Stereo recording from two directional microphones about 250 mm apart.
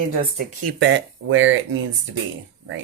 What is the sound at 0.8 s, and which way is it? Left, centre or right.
Speech, right.